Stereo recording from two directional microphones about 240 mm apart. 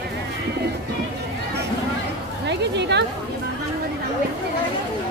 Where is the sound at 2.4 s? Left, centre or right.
Right.